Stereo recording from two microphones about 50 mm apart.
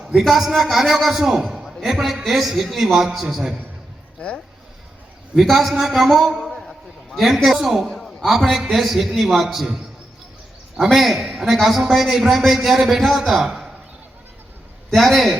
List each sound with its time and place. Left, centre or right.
0.0 s a man's voice: centre
1.5 s a sound: centre
1.8 s a man's voice: centre
5.3 s a man's voice: centre
14.8 s a man's voice: centre